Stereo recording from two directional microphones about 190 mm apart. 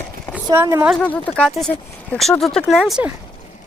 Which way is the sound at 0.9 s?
5° left (ahead or behind).